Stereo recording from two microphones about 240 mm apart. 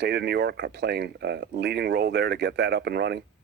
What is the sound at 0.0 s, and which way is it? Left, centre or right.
Speech, right.